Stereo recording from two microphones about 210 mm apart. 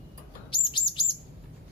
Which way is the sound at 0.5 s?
25° left (ahead or behind).